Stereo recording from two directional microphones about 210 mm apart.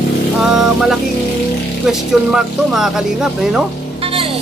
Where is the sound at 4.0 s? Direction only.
25° right (ahead or behind).